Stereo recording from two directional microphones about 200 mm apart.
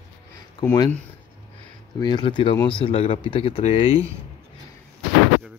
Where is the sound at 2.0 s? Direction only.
20° left (ahead or behind).